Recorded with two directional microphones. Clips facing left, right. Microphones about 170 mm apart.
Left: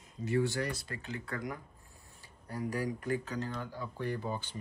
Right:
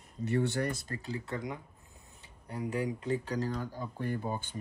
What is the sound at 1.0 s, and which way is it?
Speech, 35° right (ahead or behind).